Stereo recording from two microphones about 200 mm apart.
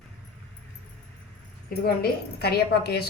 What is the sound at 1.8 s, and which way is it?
A woman's voice, 50° left (ahead or behind).